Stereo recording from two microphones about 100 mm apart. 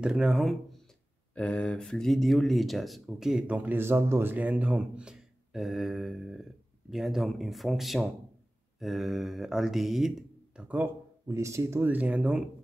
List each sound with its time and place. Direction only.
0.0 s speech: 5° right (ahead or behind)
1.3 s speech: 10° left (ahead or behind); by 10.9 s 10° right (ahead or behind)
11.2 s speech: 30° right (ahead or behind)
11.9 s speech: 15° right (ahead or behind)